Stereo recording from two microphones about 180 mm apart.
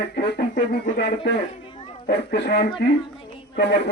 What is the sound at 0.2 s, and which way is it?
Speech, 70° left (ahead or behind).